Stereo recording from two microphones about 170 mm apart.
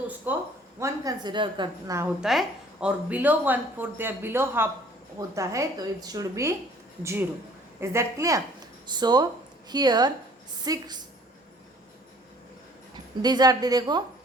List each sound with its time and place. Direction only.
0.3 s a woman's voice: 10° right (ahead or behind); by 2.0 s 25° right (ahead or behind)
2.2 s a woman's voice: centre (ahead or behind); by 11.0 s 25° right (ahead or behind)
12.9 s a woman's voice: 25° right (ahead or behind)